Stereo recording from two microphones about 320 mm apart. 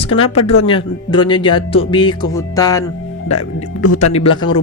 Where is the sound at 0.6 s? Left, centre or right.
Centre.